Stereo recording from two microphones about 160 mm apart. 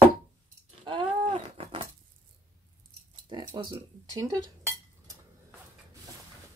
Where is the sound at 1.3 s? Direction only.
35° right (ahead or behind).